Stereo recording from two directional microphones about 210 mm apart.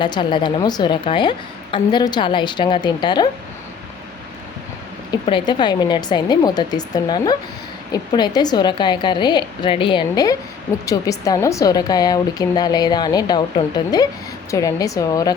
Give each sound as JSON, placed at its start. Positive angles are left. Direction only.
{"t": 0.0, "sound": "a woman's voice", "side_deg": 20}
{"t": 5.2, "sound": "a woman's voice", "side_deg": 20}